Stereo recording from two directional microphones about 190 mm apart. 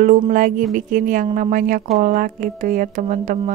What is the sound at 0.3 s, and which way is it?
Speech, 45° right (ahead or behind).